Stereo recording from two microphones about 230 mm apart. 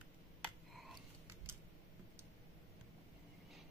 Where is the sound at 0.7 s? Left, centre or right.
Centre.